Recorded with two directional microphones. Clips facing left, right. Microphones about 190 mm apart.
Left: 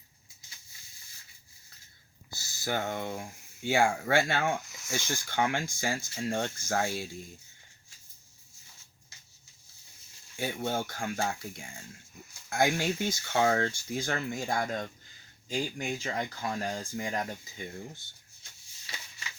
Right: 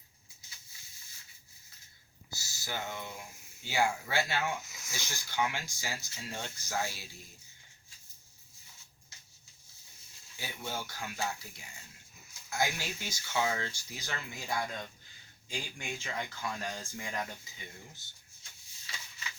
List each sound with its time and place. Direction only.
2.3 s speech: 55° left (ahead or behind)
10.3 s speech: 55° left (ahead or behind); by 17.2 s 35° left (ahead or behind)